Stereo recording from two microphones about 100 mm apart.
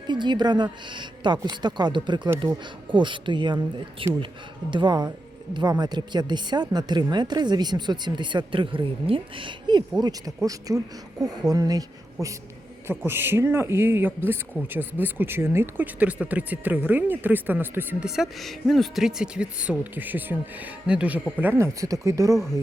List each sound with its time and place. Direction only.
0.1 s a woman's voice: 50° right (ahead or behind)
10.0 s speech: 35° right (ahead or behind)
13.1 s speech: 25° right (ahead or behind)
16.0 s speech: 15° right (ahead or behind)
18.0 s speech: 5° right (ahead or behind)
21.3 s speech: 20° right (ahead or behind)